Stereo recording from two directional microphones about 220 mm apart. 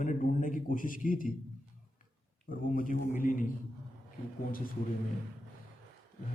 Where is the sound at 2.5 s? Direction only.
40° left (ahead or behind).